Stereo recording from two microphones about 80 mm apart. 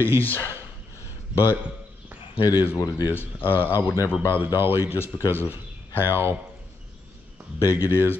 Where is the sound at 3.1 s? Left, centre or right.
Left.